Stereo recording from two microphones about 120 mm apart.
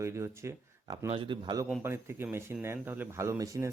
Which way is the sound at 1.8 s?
20° right (ahead or behind).